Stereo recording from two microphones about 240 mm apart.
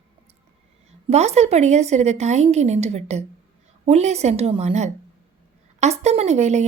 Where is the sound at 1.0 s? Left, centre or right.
Right.